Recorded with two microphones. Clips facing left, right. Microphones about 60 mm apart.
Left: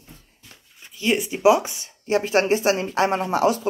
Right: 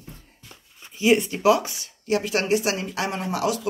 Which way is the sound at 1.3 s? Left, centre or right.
Left.